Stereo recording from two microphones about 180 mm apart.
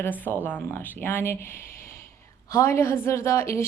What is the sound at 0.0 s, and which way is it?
A woman's voice, 10° left (ahead or behind).